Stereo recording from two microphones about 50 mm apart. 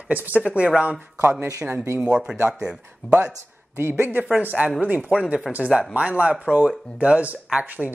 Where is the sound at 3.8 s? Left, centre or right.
Right.